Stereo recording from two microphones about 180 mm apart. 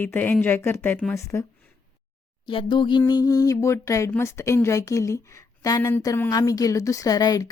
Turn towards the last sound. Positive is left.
turn(degrees=20)  # may be behind; listen again after turning